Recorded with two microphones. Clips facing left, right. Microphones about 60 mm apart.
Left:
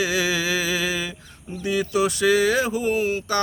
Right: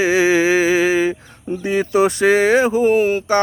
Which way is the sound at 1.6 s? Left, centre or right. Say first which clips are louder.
Right 6 dB; right.